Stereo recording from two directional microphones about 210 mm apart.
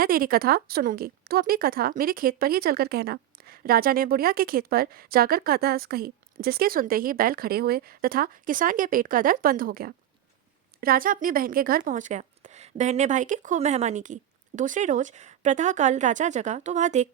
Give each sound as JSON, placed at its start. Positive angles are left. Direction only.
{"t": 0.0, "sound": "speech", "side_deg": -45}